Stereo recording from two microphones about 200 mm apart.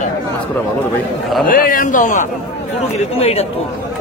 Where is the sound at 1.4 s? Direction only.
45° left (ahead or behind).